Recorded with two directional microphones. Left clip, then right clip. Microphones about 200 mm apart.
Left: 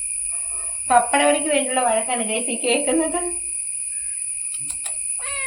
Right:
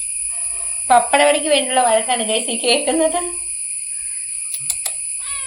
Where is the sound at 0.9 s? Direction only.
35° right (ahead or behind).